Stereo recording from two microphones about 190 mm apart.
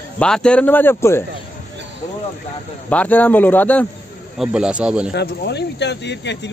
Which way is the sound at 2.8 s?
10° left (ahead or behind).